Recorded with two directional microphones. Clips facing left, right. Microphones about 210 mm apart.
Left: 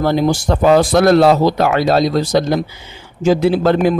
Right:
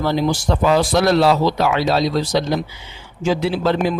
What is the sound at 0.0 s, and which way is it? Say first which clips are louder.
A man's voice: left 4 dB; 50° left (ahead or behind).